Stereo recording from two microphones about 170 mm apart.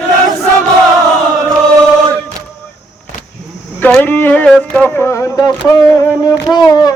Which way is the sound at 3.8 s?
10° left (ahead or behind).